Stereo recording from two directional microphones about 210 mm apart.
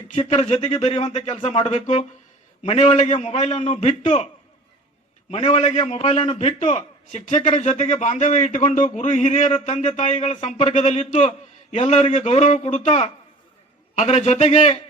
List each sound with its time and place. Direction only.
0.1 s a man's voice: 30° left (ahead or behind)
5.3 s a man's voice: 30° left (ahead or behind)